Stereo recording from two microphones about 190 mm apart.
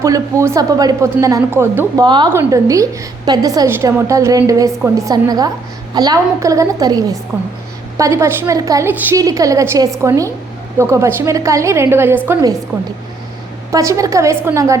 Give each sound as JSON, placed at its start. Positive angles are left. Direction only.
{"t": 0.0, "sound": "a woman's voice", "side_deg": -15}
{"t": 2.0, "sound": "a woman's voice", "side_deg": -25}
{"t": 13.7, "sound": "a woman's voice", "side_deg": -15}